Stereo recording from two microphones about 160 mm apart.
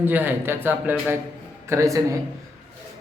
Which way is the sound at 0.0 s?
10° right (ahead or behind).